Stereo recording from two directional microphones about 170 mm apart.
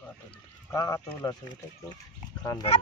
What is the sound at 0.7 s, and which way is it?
Speech, 20° left (ahead or behind).